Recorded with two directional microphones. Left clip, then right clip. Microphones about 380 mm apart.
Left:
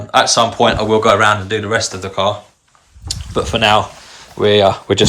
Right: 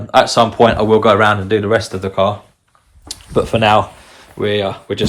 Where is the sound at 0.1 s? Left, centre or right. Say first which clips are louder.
Right 1 dB; centre.